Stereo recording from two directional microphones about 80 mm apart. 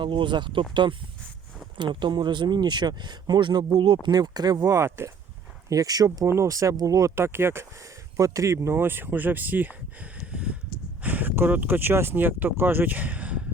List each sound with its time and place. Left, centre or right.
0.0 s speech: right
4.1 s speech: right
4.7 s speech: right
5.6 s speech: right
6.2 s speech: right
7.2 s speech: right
8.1 s speech: right; by 13.4 s centre